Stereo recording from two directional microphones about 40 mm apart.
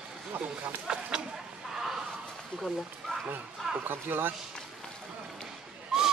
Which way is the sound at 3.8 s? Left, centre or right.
Right.